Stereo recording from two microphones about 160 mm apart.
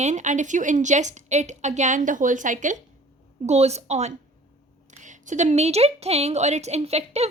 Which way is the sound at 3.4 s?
40° right (ahead or behind).